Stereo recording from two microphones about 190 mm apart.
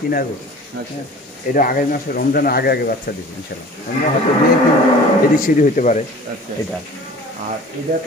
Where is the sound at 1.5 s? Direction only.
45° left (ahead or behind).